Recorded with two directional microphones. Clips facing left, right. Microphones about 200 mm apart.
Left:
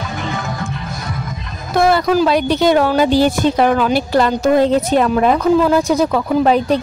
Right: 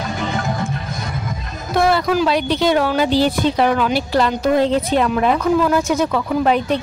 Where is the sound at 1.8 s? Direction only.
40° left (ahead or behind).